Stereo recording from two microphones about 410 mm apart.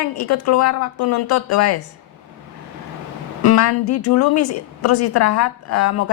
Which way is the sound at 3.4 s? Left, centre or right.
Left.